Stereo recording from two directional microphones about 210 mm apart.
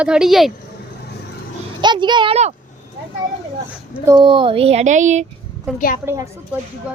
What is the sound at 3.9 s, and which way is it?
Speech, 10° right (ahead or behind).